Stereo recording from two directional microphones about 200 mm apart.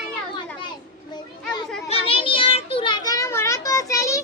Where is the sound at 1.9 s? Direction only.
25° left (ahead or behind).